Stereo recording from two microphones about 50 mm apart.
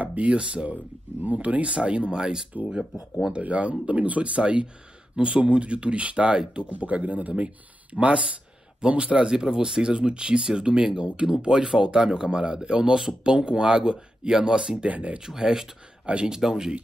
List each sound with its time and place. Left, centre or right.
0.0 s speech: right
2.5 s speech: right
6.7 s speech: right
14.9 s speech: right
15.1 s speech: centre